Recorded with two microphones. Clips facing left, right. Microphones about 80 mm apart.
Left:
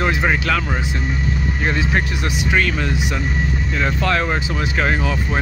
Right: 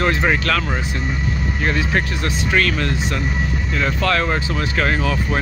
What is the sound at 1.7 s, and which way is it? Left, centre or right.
Speech, centre.